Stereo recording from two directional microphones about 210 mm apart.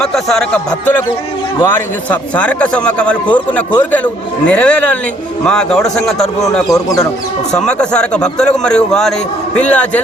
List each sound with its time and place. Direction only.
0.0 s a man's voice: centre (ahead or behind)
6.7 s a man's voice: 15° left (ahead or behind)
7.5 s a man's voice: 5° left (ahead or behind)